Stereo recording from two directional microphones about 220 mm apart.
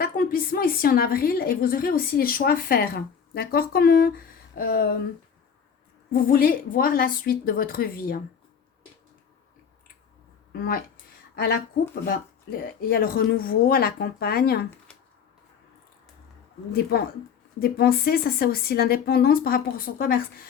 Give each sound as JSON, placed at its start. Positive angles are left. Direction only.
{"t": 0.0, "sound": "a woman's voice", "side_deg": 40}
{"t": 6.1, "sound": "a woman's voice", "side_deg": 40}
{"t": 10.5, "sound": "speech", "side_deg": 40}
{"t": 12.0, "sound": "a woman's voice", "side_deg": 40}
{"t": 17.6, "sound": "a woman's voice", "side_deg": 45}